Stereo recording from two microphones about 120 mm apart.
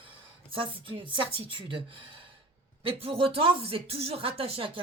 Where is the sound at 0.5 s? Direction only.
45° right (ahead or behind).